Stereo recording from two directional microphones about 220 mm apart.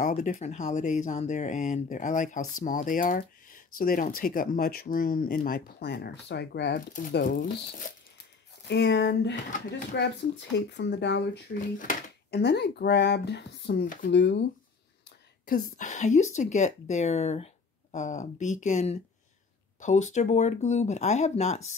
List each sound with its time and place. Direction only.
0.0 s speech: 35° left (ahead or behind)
8.6 s speech: 50° left (ahead or behind)
9.5 s speech: 35° left (ahead or behind)
10.7 s speech: 50° left (ahead or behind); by 21.6 s 30° left (ahead or behind)